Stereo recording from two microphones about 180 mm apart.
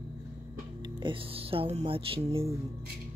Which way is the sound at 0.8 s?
25° right (ahead or behind).